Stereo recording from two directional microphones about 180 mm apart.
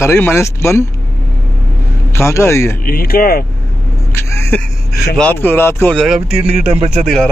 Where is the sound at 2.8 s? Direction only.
55° left (ahead or behind).